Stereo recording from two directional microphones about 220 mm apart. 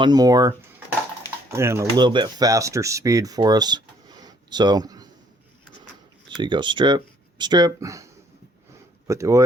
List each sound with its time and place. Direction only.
0.0 s speech: 20° right (ahead or behind)
6.2 s speech: 20° right (ahead or behind)